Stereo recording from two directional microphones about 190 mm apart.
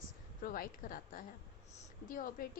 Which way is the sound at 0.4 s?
45° left (ahead or behind).